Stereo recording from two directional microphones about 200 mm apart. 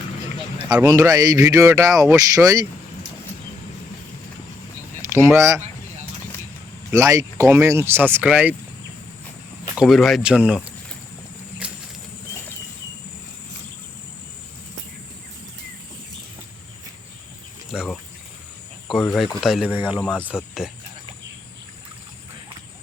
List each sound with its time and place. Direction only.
0.7 s speech: 15° right (ahead or behind)
5.0 s speech: 15° right (ahead or behind)
6.9 s speech: 15° right (ahead or behind)
9.7 s speech: centre (ahead or behind)
11.6 s a sound: 5° right (ahead or behind)
17.7 s a sound: centre (ahead or behind)
18.9 s speech: centre (ahead or behind)
20.0 s speech: 5° left (ahead or behind)